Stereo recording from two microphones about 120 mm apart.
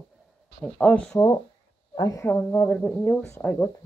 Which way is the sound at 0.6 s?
10° left (ahead or behind).